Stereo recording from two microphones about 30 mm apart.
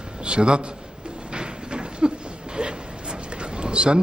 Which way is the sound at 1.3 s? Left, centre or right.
Right.